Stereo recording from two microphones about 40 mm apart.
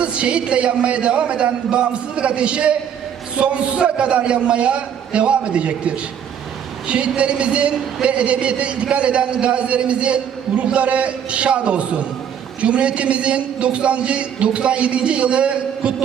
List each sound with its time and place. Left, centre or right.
0.0 s a man's voice: right